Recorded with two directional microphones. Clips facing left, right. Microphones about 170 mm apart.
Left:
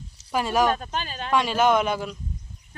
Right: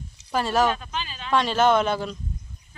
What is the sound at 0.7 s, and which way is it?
Speech, 45° left (ahead or behind).